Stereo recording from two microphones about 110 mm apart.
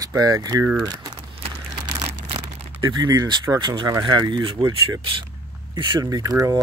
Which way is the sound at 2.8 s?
40° right (ahead or behind).